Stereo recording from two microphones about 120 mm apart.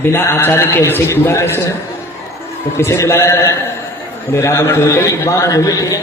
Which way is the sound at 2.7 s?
25° left (ahead or behind).